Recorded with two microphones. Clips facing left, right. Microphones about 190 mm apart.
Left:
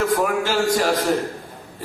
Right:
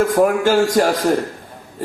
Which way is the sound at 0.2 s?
50° right (ahead or behind).